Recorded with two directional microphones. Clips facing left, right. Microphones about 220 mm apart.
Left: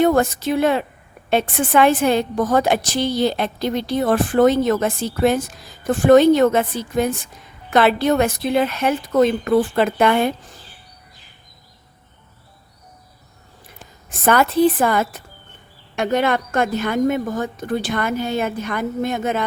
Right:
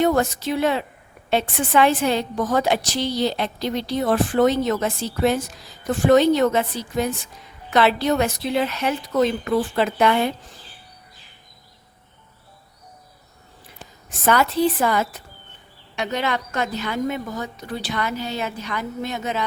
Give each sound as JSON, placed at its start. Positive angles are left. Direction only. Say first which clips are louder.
{"t": 0.0, "sound": "a woman's voice", "louder": "left 3 dB", "side_deg": 50}
{"t": 14.1, "sound": "a woman's voice", "louder": "left 3 dB", "side_deg": 50}